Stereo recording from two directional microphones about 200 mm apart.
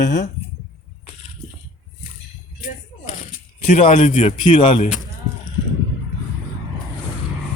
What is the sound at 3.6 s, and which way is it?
Speech, 30° left (ahead or behind).